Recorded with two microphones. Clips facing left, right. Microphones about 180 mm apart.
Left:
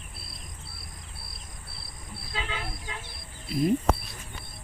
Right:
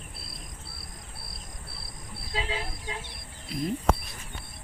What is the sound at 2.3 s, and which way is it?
Vehicle, 35° right (ahead or behind).